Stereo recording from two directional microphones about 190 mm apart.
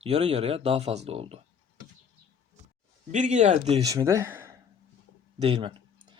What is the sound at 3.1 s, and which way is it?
Speech, 40° right (ahead or behind).